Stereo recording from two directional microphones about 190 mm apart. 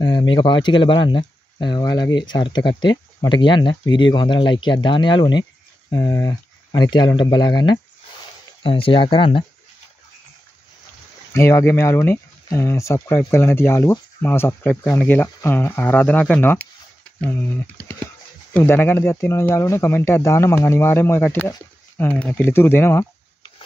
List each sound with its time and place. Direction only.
0.0 s speech: 25° left (ahead or behind)
11.3 s speech: 15° left (ahead or behind)